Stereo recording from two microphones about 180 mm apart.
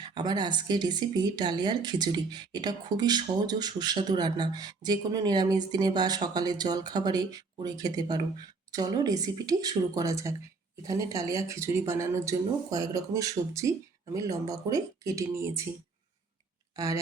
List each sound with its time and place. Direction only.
0.0 s a woman's voice: 25° right (ahead or behind)
16.7 s speech: 20° right (ahead or behind)